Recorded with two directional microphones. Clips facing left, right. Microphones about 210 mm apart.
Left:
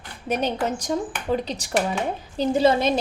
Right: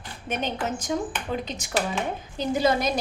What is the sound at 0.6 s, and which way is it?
Speech, 35° left (ahead or behind).